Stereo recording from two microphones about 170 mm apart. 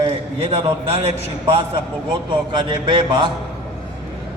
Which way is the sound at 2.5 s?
30° right (ahead or behind).